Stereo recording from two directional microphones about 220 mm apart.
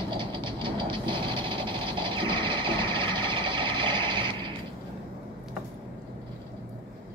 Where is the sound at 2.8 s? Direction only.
20° right (ahead or behind).